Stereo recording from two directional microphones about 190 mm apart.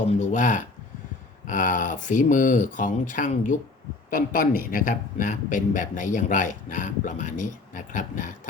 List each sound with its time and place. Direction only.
0.2 s a man's voice: 40° left (ahead or behind)